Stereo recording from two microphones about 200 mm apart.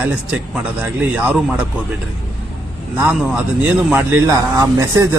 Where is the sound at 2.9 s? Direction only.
5° right (ahead or behind).